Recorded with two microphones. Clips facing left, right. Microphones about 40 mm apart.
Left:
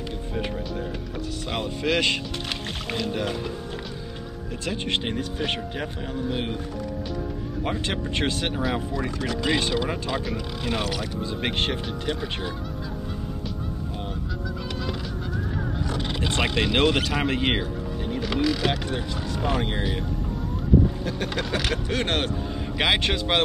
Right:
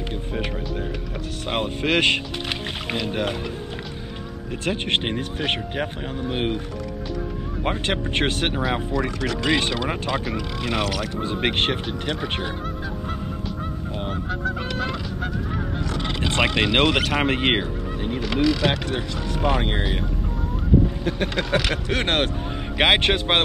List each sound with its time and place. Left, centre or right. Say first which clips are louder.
1.5 s speech: right 3 dB; right
4.6 s speech: right 4 dB; right
7.6 s speech: right 4 dB; right
14.4 s goose: right 6 dB; right
16.2 s a sound: right 4 dB; right
16.4 s speech: right 2 dB; right
18.2 s speech: right 3 dB; centre
18.9 s speech: right 2 dB; right
21.0 s speech: right 3 dB; right